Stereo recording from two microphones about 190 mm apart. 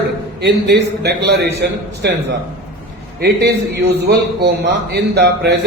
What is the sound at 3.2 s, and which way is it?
Speech, 55° right (ahead or behind).